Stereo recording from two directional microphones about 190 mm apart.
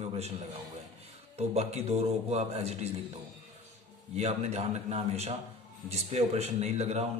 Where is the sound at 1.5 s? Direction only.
35° right (ahead or behind).